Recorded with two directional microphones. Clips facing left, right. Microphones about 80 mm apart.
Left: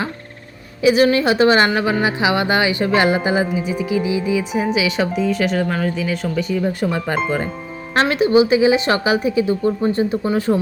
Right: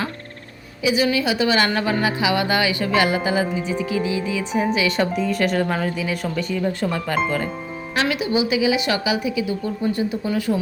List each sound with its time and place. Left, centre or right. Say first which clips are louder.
0.8 s a woman's voice: left 6 dB; left
1.6 s speech: left 3 dB; centre
3.4 s speech: left 2 dB; centre
6.6 s speech: left 3 dB; centre
8.0 s speech: left 7 dB; left